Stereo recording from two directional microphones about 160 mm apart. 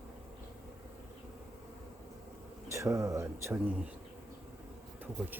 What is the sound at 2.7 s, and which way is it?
Speech, 20° right (ahead or behind).